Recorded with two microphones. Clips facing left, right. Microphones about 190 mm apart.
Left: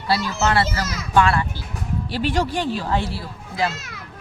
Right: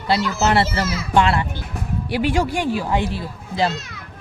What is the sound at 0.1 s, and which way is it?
A child's voice, 20° right (ahead or behind).